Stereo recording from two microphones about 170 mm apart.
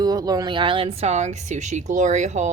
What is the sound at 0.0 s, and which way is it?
A woman's voice, 20° right (ahead or behind).